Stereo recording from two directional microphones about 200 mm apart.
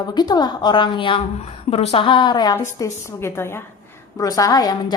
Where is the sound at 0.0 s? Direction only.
20° left (ahead or behind).